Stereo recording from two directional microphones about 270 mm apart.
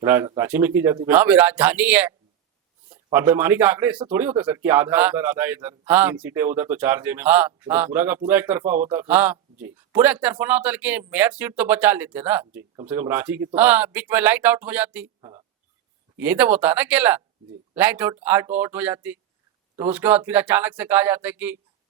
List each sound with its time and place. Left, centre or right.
0.0 s speech: centre